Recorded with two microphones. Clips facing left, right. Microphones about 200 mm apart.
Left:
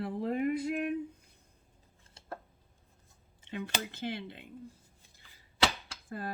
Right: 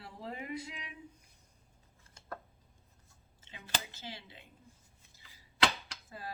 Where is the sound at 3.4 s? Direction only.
55° left (ahead or behind).